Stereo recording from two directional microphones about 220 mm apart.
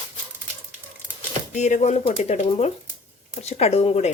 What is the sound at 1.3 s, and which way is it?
Speech, 30° left (ahead or behind).